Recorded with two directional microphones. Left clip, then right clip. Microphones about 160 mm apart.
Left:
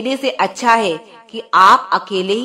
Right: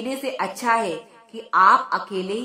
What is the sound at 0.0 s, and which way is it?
A woman's voice, 30° left (ahead or behind).